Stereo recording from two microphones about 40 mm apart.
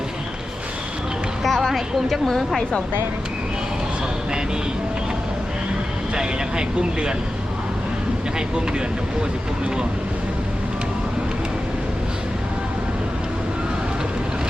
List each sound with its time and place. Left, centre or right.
1.5 s a woman's voice: centre
6.1 s speech: right